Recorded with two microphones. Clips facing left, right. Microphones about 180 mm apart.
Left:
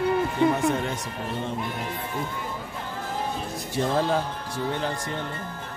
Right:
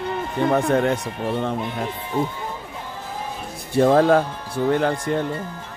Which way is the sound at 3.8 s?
60° right (ahead or behind).